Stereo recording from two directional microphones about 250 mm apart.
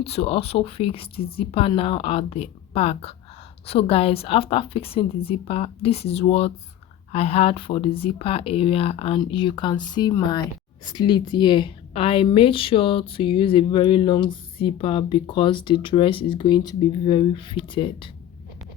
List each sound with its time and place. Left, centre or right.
0.0 s a woman's voice: left